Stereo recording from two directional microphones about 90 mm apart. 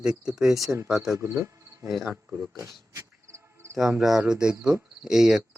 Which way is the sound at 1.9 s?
Centre (ahead or behind).